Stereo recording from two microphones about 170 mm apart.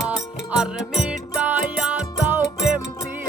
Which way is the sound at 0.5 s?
5° right (ahead or behind).